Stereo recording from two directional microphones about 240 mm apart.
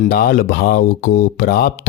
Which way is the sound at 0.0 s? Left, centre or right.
Left.